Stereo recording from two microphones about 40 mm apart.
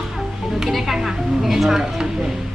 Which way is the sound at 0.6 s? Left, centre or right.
Centre.